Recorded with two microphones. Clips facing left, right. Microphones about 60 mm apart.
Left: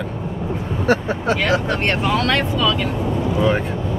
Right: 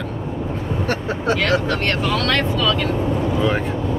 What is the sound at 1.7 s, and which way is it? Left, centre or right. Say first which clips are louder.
Speech: left 1 dB; left.